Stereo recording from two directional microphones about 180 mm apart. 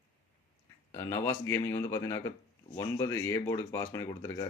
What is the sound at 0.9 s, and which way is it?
Speech, 15° left (ahead or behind).